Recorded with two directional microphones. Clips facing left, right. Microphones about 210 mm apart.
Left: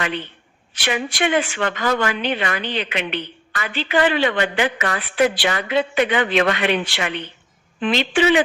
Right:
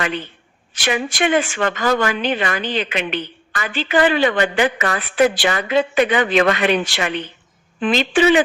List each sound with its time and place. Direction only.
0.8 s speech: 45° right (ahead or behind)